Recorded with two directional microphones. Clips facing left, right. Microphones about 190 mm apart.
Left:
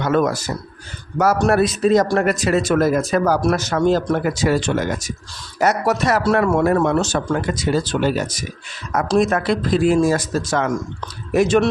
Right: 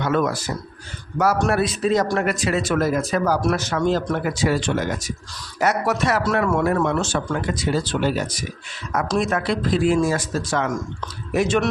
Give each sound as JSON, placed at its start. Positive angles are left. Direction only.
{"t": 0.0, "sound": "speech", "side_deg": 40}